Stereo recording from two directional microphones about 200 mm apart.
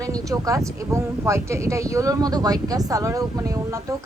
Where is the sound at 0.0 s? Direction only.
15° right (ahead or behind).